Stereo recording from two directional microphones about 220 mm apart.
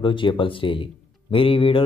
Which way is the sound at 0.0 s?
20° left (ahead or behind).